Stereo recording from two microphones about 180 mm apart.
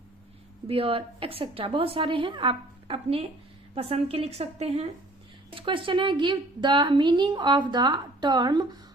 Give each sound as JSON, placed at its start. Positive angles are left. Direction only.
{"t": 0.7, "sound": "a woman's voice", "side_deg": -30}